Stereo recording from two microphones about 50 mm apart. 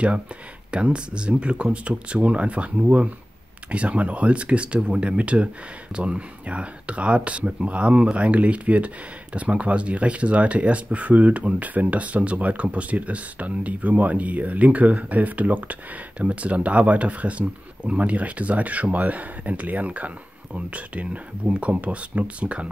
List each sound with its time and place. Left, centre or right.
0.7 s speech: right